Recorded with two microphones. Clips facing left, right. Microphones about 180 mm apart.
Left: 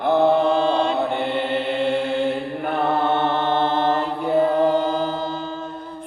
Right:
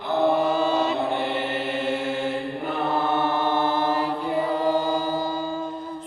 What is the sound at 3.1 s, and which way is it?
Mantra, 10° right (ahead or behind).